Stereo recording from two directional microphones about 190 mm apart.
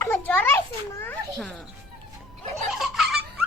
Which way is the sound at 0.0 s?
10° left (ahead or behind).